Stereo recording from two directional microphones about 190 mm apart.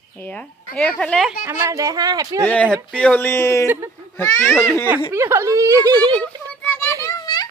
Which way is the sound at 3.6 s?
10° right (ahead or behind).